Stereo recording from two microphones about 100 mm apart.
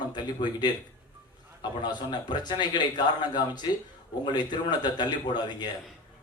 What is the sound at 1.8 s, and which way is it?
A man's voice, 45° left (ahead or behind).